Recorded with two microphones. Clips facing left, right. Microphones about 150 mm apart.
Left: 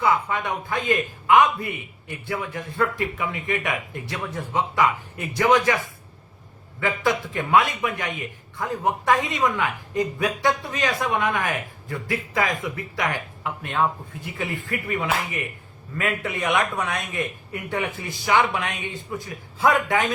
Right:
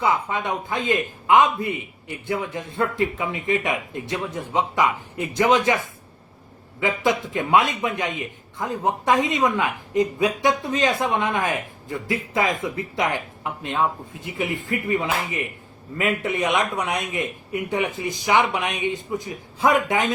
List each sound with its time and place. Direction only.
0.0 s a man's voice: 20° right (ahead or behind)